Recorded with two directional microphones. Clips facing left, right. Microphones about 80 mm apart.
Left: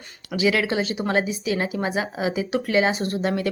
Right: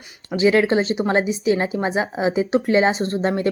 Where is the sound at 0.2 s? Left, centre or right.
Right.